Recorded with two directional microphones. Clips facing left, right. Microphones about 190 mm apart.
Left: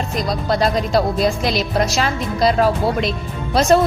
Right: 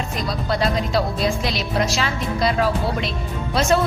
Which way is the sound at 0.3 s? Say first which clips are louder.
Left 3 dB; 40° left (ahead or behind).